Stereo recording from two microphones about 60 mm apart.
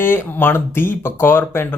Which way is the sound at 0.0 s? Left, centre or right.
Left.